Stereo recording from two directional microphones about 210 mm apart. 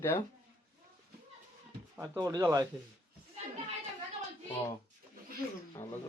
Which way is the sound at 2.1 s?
15° right (ahead or behind).